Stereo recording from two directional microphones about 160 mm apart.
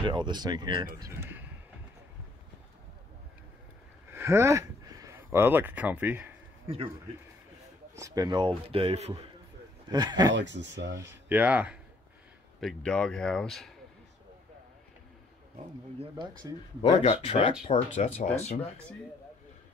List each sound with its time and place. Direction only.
0.0 s speech: 30° right (ahead or behind)
0.9 s speech: 20° right (ahead or behind)
4.1 s speech: 15° right (ahead or behind)
7.9 s speech: 20° right (ahead or behind); by 9.2 s 40° right (ahead or behind)
9.8 s speech: 25° right (ahead or behind)
10.3 s speech: 90° right
11.0 s speech: 15° right (ahead or behind)
12.5 s speech: 5° left (ahead or behind)
17.0 s speech: 35° left (ahead or behind)